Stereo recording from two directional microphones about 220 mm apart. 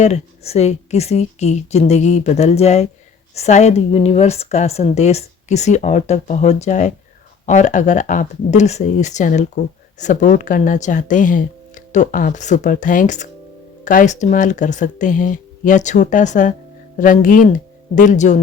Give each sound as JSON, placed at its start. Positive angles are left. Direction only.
{"t": 0.0, "sound": "speech", "side_deg": 30}